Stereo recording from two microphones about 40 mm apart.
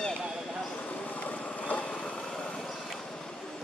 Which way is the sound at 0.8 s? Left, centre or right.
Left.